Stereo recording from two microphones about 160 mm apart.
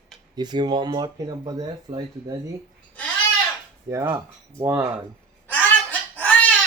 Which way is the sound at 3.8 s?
15° right (ahead or behind).